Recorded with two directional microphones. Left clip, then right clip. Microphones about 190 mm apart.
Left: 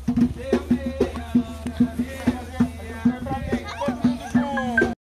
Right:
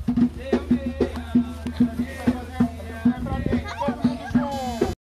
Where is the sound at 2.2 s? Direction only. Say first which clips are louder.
Right 1 dB; 45° left (ahead or behind).